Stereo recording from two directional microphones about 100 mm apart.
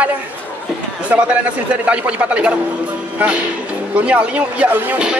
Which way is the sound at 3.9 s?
15° right (ahead or behind).